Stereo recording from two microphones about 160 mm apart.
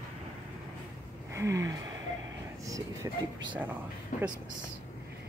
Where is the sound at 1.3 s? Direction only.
20° right (ahead or behind).